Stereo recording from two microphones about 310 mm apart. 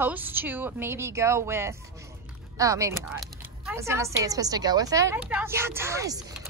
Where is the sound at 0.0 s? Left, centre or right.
Centre.